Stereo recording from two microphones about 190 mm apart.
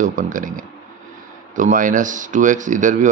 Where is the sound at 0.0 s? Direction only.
45° right (ahead or behind).